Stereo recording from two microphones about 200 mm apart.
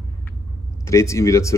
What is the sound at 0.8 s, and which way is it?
Speech, 15° left (ahead or behind).